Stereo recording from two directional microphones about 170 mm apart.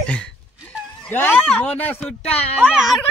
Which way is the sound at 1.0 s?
10° left (ahead or behind).